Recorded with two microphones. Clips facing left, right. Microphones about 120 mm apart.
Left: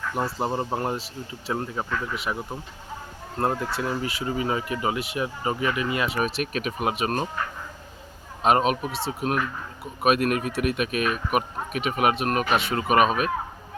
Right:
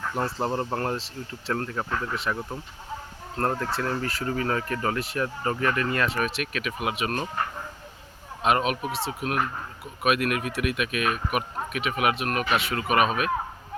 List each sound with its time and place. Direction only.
0.2 s speech: 10° left (ahead or behind)
6.2 s speech: 40° left (ahead or behind)
8.4 s speech: 30° left (ahead or behind)
10.0 s speech: 35° left (ahead or behind)